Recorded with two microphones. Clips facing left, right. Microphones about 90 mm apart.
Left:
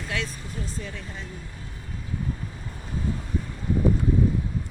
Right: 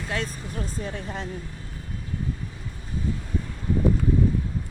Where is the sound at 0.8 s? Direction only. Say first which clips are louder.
Right 4 dB; 45° right (ahead or behind).